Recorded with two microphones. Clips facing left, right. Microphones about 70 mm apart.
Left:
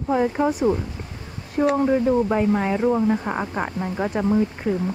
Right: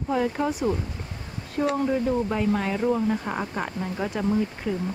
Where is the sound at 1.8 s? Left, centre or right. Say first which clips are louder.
Left 5 dB; left.